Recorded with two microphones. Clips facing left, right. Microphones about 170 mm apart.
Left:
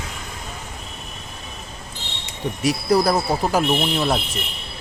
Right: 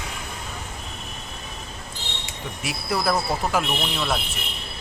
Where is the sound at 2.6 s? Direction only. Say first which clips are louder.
Left 7 dB; 40° left (ahead or behind).